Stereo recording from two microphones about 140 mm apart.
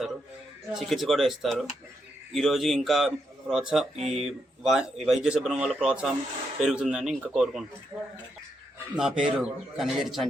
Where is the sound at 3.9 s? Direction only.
50° right (ahead or behind).